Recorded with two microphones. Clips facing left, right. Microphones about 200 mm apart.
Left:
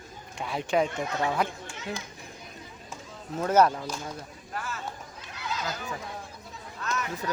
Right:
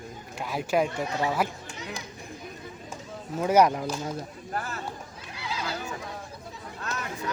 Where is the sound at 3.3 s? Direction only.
10° right (ahead or behind).